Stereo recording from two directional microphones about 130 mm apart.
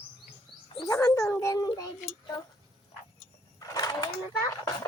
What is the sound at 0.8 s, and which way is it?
Speech, 25° left (ahead or behind).